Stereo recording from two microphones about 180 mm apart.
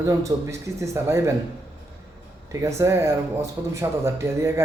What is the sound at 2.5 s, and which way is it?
Speech, 15° right (ahead or behind).